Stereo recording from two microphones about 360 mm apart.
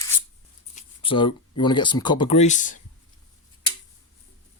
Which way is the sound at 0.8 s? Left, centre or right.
Centre.